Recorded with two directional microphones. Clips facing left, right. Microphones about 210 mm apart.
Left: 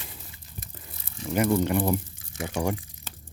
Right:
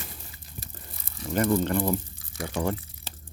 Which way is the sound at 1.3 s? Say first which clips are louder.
Left 1 dB; 10° left (ahead or behind).